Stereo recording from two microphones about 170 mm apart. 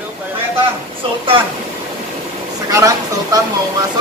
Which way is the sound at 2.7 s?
20° right (ahead or behind).